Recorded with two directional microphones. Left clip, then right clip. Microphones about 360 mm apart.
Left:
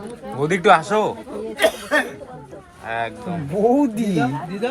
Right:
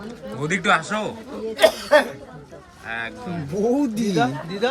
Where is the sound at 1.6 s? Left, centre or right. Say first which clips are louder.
Right 3 dB; right.